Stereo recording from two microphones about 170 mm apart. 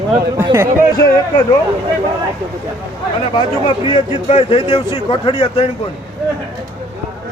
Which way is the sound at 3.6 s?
30° left (ahead or behind).